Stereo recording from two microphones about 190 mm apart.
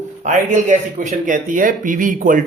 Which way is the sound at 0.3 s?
40° right (ahead or behind).